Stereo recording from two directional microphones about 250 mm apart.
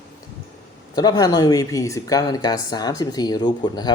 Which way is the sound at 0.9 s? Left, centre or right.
Centre.